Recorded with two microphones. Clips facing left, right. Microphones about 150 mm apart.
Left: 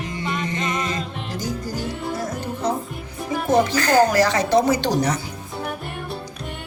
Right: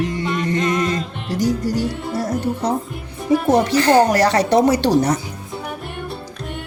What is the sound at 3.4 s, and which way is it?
Speech, 30° right (ahead or behind).